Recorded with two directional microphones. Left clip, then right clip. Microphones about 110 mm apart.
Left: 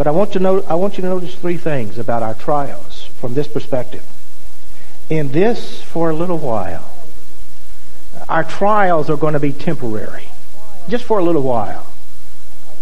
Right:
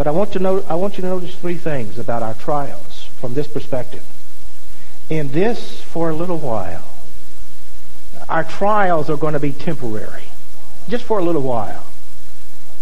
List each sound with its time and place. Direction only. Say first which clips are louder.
0.0 s speech: left 3 dB; 15° right (ahead or behind)
5.0 s speech: left 3 dB; 15° right (ahead or behind)
8.3 s speech: left 2 dB; 15° right (ahead or behind)